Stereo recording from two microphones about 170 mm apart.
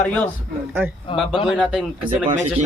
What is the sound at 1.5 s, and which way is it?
Speech, 5° right (ahead or behind).